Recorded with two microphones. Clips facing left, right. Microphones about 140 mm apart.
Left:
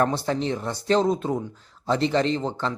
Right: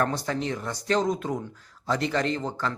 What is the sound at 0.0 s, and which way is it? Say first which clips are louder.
Speech: left 4 dB; 30° left (ahead or behind).